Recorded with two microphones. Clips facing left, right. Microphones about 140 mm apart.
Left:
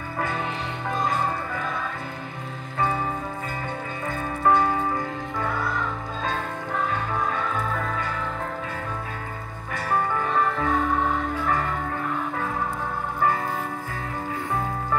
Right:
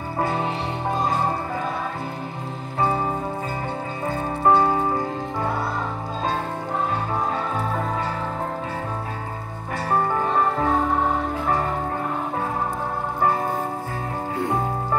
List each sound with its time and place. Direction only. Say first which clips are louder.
0.2 s music: right 4 dB; 30° right (ahead or behind)
4.1 s music: right 2 dB; 35° right (ahead or behind)
7.3 s music: right 2 dB; 35° right (ahead or behind)
9.8 s music: right 3 dB; 30° right (ahead or behind)
11.3 s music: right 2 dB; 25° right (ahead or behind)